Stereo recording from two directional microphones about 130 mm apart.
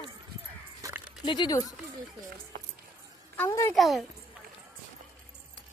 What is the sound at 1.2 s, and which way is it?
Speech, 35° left (ahead or behind).